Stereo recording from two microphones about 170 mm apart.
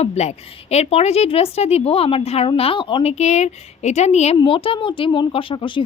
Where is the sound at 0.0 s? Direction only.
40° left (ahead or behind).